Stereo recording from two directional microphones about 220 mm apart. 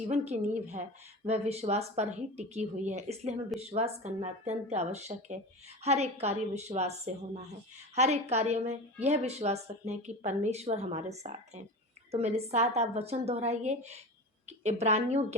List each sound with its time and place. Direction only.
0.1 s a woman's voice: 30° right (ahead or behind)